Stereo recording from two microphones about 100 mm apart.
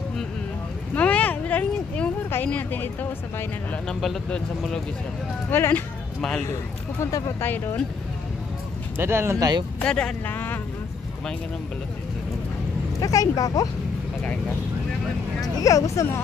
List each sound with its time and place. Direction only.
0.9 s speech: 15° left (ahead or behind)
4.0 s speech: 5° left (ahead or behind)
5.5 s speech: 20° left (ahead or behind)
7.0 s speech: 35° left (ahead or behind)
7.3 s speech: 20° left (ahead or behind)
8.9 s speech: 25° right (ahead or behind)
9.4 s speech: 45° right (ahead or behind)
9.8 s speech: 10° left (ahead or behind)
13.0 s speech: 35° left (ahead or behind)
15.6 s speech: 30° left (ahead or behind)